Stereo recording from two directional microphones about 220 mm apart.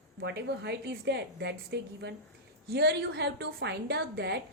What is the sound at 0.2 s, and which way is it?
A woman's voice, 50° right (ahead or behind).